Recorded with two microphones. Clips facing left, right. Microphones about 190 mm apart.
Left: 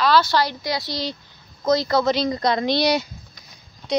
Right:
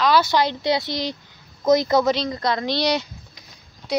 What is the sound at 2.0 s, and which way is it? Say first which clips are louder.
Speech: left 1 dB; 5° left (ahead or behind).